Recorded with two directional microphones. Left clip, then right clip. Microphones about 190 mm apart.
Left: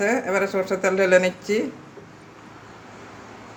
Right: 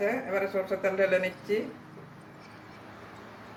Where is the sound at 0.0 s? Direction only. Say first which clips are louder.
Left 7 dB; 60° left (ahead or behind).